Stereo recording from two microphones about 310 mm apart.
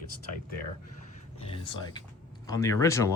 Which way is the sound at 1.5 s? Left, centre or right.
Centre.